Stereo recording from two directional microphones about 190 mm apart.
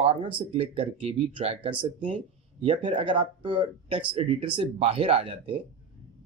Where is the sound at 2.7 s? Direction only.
25° right (ahead or behind).